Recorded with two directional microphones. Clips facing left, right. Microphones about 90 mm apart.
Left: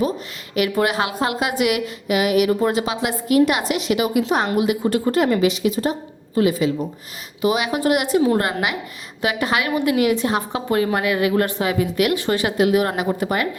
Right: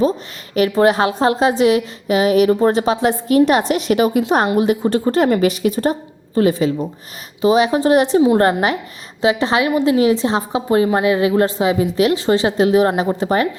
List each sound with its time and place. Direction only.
0.5 s a woman's voice: 35° right (ahead or behind)
9.2 s a woman's voice: 25° right (ahead or behind)